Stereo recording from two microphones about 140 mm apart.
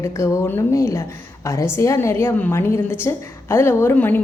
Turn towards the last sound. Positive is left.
turn(degrees=15)  # may be behind; listen again after turning